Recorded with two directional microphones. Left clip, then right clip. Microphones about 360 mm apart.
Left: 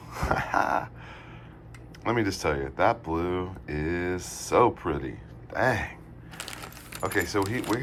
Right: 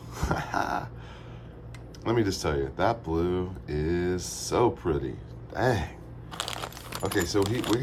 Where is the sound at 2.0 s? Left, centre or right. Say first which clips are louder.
Left 1 dB; centre.